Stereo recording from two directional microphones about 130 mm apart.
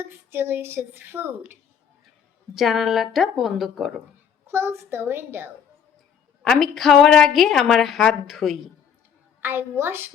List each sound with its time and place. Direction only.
0.3 s a woman's voice: 15° right (ahead or behind)
2.6 s a woman's voice: centre (ahead or behind)
4.4 s a woman's voice: 20° right (ahead or behind)
6.4 s a woman's voice: centre (ahead or behind)
9.4 s a woman's voice: 15° right (ahead or behind)